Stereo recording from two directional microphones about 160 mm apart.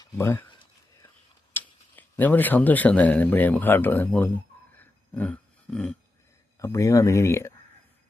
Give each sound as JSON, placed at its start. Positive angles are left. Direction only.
{"t": 0.0, "sound": "speech", "side_deg": 15}
{"t": 1.5, "sound": "speech", "side_deg": 10}
{"t": 4.8, "sound": "a sound", "side_deg": 10}
{"t": 6.6, "sound": "speech", "side_deg": 20}